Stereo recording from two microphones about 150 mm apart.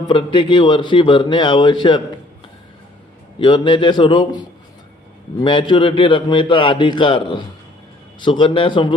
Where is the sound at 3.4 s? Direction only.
35° left (ahead or behind).